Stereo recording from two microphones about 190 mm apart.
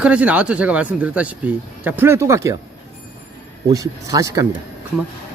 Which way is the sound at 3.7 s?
20° right (ahead or behind).